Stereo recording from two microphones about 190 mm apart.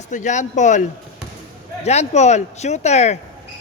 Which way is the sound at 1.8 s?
35° left (ahead or behind).